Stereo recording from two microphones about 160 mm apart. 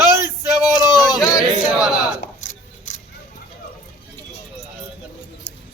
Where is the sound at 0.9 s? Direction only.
25° left (ahead or behind).